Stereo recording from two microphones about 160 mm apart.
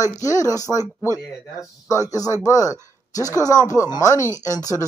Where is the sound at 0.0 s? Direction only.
20° left (ahead or behind).